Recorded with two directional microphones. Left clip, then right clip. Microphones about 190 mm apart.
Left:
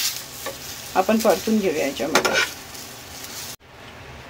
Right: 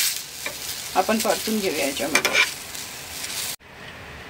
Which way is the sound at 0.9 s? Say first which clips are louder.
Left 3 dB; 20° left (ahead or behind).